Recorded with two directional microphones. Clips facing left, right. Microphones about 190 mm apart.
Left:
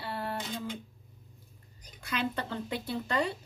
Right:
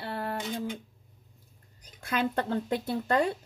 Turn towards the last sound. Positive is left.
turn(degrees=-50)  # may be behind; listen again after turning